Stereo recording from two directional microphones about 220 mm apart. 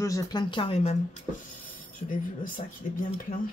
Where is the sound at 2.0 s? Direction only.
40° left (ahead or behind).